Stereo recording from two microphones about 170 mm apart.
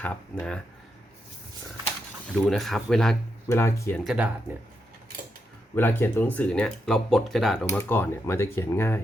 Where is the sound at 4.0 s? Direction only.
Centre (ahead or behind).